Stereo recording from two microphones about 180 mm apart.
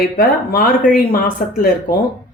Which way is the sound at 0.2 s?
60° left (ahead or behind).